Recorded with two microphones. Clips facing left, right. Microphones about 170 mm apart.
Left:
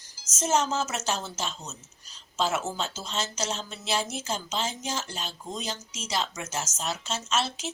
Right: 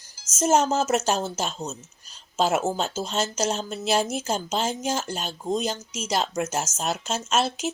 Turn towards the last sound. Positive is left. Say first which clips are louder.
# right 5 dB
turn(degrees=-50)  # may be behind; listen again after turning